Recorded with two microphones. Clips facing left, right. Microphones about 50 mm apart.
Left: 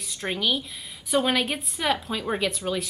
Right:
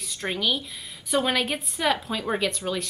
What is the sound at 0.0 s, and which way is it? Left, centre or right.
A woman's voice, centre.